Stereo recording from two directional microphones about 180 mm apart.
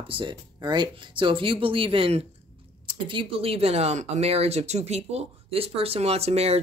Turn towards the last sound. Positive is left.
turn(degrees=-35)  # may be behind; listen again after turning